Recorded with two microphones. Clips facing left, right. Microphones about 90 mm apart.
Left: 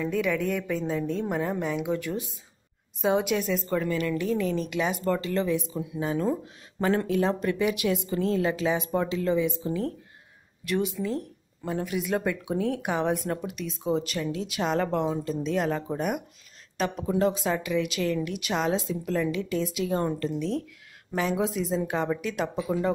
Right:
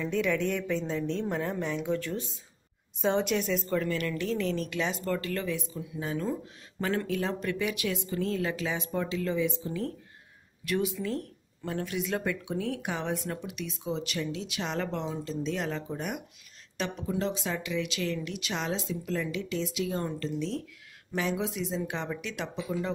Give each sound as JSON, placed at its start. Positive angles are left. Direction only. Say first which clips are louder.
{"t": 0.0, "sound": "a woman's voice", "louder": "left 2 dB", "side_deg": 5}
{"t": 10.6, "sound": "a woman's voice", "louder": "left 2 dB", "side_deg": 0}
{"t": 13.3, "sound": "speech", "louder": "left 5 dB", "side_deg": 35}
{"t": 17.9, "sound": "a woman's voice", "louder": "left 5 dB", "side_deg": 5}
{"t": 18.2, "sound": "speech", "louder": "left 6 dB", "side_deg": 50}
{"t": 21.4, "sound": "speech", "louder": "left 5 dB", "side_deg": 40}